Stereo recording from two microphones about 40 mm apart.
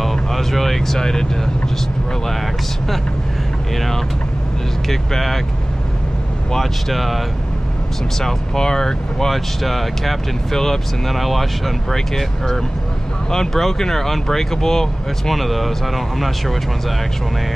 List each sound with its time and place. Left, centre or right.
0.0 s vehicle: centre
3.7 s speech: centre
6.5 s speech: centre
8.2 s speech: centre
9.3 s speech: centre